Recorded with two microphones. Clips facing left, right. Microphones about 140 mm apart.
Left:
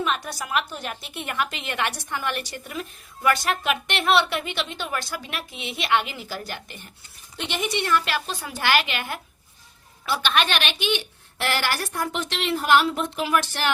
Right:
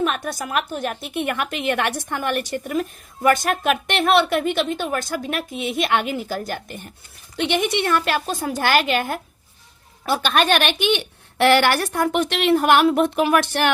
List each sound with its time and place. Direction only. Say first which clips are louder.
0.0 s a woman's voice: right 4 dB; 50° right (ahead or behind)
7.3 s a woman's voice: right 7 dB; 60° right (ahead or behind)